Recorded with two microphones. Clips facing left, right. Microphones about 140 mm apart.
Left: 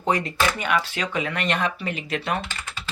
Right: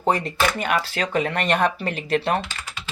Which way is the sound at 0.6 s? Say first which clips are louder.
Right 1 dB; 40° right (ahead or behind).